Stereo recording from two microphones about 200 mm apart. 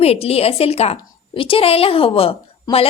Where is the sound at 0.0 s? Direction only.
30° left (ahead or behind).